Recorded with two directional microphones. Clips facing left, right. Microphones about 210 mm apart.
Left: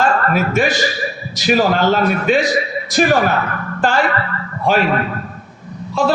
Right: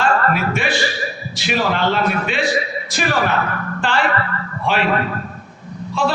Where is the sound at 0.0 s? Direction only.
40° left (ahead or behind).